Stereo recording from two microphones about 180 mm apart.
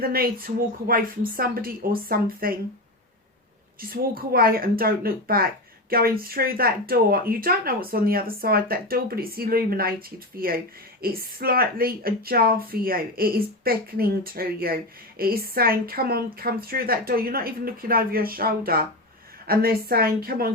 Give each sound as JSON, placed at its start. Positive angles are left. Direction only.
{"t": 0.0, "sound": "speech", "side_deg": -55}
{"t": 3.8, "sound": "speech", "side_deg": -55}